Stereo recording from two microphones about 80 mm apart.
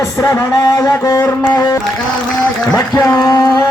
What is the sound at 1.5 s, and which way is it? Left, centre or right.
Music, left.